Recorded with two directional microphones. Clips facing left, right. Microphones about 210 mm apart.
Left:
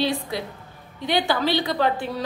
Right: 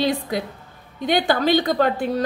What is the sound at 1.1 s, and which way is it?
Speech, 50° right (ahead or behind).